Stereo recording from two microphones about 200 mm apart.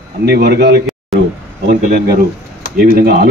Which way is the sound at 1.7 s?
50° right (ahead or behind).